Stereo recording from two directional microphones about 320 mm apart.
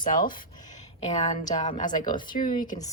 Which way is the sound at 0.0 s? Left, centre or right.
Left.